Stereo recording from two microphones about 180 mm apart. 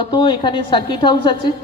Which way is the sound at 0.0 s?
25° left (ahead or behind).